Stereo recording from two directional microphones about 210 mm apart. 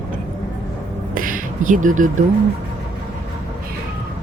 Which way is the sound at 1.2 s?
40° right (ahead or behind).